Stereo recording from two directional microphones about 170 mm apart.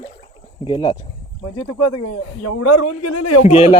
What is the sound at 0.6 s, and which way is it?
Speech, 25° left (ahead or behind).